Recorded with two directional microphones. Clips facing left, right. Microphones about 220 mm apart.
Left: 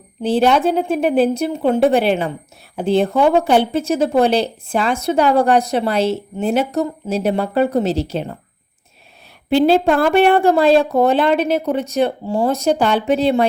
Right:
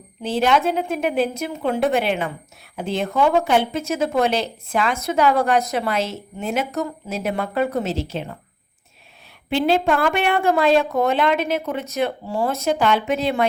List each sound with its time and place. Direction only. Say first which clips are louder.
0.2 s a woman's voice: left 5 dB; 30° left (ahead or behind)
9.5 s a woman's voice: left 5 dB; 35° left (ahead or behind)